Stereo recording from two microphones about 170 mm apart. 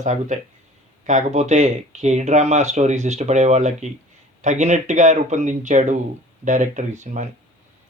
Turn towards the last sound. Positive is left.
turn(degrees=-45)  # may be behind; listen again after turning